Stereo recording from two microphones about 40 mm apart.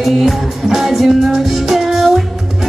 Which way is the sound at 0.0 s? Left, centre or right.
Centre.